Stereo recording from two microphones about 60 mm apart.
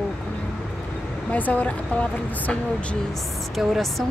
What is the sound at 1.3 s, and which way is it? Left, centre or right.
Speech, left.